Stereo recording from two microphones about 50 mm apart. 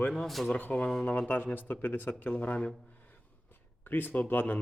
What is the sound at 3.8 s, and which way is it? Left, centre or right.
Speech, left.